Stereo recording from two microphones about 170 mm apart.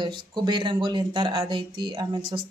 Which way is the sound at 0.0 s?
25° right (ahead or behind).